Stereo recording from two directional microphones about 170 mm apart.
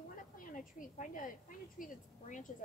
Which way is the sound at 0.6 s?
50° left (ahead or behind).